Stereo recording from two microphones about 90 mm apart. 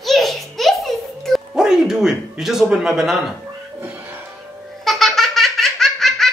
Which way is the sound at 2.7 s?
5° right (ahead or behind).